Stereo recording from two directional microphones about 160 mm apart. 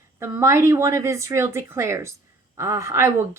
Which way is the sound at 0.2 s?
15° right (ahead or behind).